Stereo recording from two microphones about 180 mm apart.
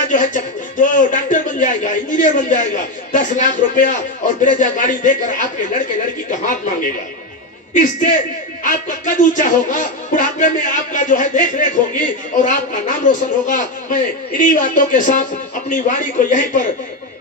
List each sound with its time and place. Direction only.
0.1 s a man's voice: 45° left (ahead or behind)
7.7 s speech: 45° left (ahead or behind)